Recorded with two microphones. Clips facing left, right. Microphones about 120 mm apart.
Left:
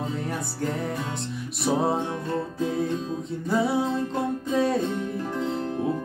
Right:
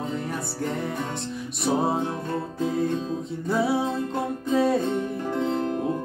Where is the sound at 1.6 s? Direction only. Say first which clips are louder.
Even; centre (ahead or behind).